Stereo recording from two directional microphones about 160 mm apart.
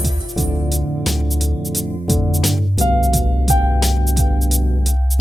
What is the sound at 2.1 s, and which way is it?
Music, centre (ahead or behind).